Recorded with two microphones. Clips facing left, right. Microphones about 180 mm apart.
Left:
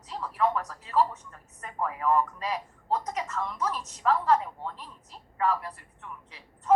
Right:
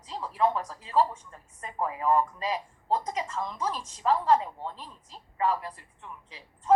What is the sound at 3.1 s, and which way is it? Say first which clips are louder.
A woman's voice: even; 30° right (ahead or behind).